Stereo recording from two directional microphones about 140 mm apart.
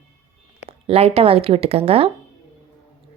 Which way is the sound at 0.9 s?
45° right (ahead or behind).